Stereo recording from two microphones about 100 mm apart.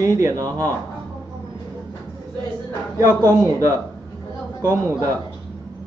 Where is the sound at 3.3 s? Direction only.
30° right (ahead or behind).